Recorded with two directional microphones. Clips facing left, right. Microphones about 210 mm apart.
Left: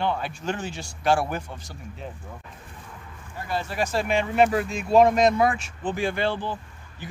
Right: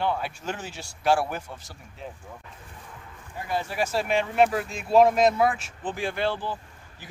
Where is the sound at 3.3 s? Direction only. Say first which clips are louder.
Even; 15° right (ahead or behind).